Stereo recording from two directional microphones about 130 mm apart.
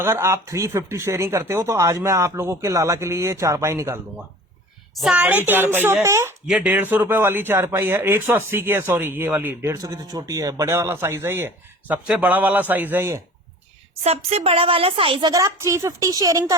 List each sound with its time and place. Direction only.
0.0 s speech: 20° right (ahead or behind)
4.9 s speech: 5° right (ahead or behind); by 6.3 s 20° right (ahead or behind)
6.5 s speech: 5° right (ahead or behind); by 13.2 s 20° right (ahead or behind)
14.0 s a woman's voice: 55° right (ahead or behind)
15.3 s speech: 20° right (ahead or behind)